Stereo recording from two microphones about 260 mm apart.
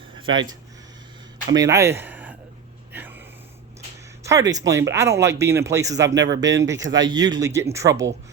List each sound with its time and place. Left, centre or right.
0.2 s speech: centre
1.5 s speech: centre
2.9 s a sound: centre
4.3 s speech: centre